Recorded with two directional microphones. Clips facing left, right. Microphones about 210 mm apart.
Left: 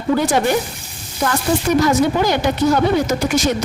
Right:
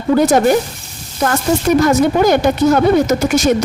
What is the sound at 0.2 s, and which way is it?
Speech, 45° right (ahead or behind).